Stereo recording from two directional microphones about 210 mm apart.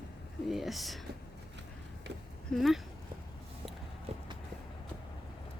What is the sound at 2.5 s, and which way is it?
Speech, centre (ahead or behind).